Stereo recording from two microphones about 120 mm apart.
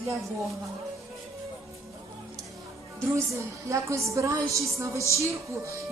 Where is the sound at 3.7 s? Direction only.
25° right (ahead or behind).